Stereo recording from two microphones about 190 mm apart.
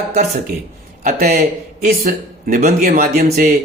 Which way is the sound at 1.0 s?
50° right (ahead or behind).